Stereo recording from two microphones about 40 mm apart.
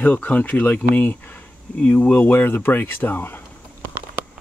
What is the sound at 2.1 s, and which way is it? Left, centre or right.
Speech, left.